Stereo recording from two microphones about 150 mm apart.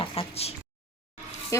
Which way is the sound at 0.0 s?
35° left (ahead or behind).